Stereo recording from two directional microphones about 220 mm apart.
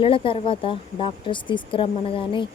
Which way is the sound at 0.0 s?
25° left (ahead or behind).